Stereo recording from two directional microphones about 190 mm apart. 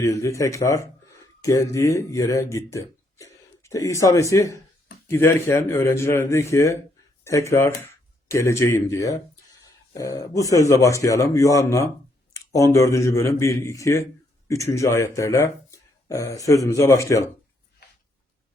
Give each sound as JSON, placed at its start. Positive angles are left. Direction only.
{"t": 0.0, "sound": "speech", "side_deg": 15}